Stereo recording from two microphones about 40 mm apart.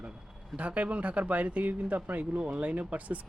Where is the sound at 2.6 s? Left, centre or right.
Right.